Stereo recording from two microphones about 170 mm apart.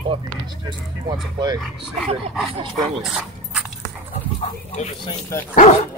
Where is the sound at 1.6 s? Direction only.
Centre (ahead or behind).